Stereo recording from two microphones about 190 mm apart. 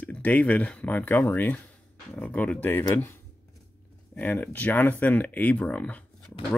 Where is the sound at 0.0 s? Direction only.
10° left (ahead or behind).